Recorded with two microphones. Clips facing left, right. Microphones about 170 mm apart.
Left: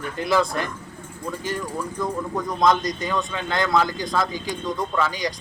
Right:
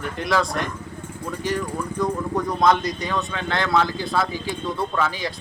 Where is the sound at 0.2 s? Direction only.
Centre (ahead or behind).